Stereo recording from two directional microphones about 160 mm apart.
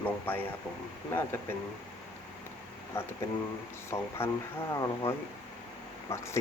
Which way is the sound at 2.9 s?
15° left (ahead or behind).